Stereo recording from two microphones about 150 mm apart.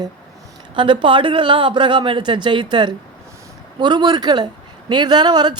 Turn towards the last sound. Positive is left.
turn(degrees=-30)  # may be behind; listen again after turning